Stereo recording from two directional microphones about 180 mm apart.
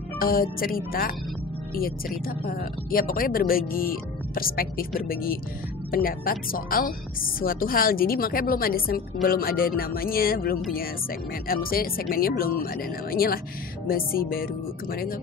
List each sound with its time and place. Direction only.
0.2 s speech: 55° left (ahead or behind)